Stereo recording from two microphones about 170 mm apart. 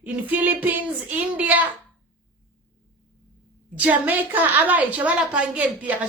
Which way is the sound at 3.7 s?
10° right (ahead or behind).